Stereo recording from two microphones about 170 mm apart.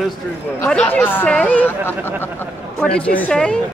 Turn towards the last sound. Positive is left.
turn(degrees=5)  # may be behind; listen again after turning